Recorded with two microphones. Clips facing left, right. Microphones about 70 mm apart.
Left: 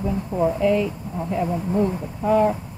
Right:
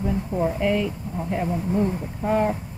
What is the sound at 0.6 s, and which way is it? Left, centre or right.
Speech, right.